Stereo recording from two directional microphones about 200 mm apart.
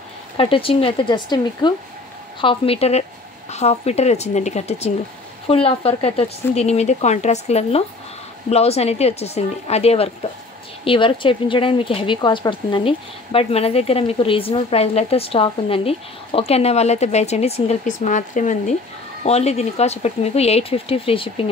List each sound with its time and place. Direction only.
0.4 s speech: 25° left (ahead or behind)